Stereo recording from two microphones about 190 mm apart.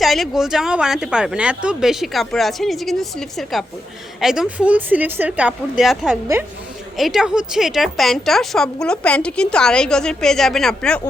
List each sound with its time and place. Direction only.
0.0 s a woman's voice: centre (ahead or behind)